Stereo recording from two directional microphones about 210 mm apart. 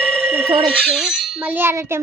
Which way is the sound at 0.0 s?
5° left (ahead or behind).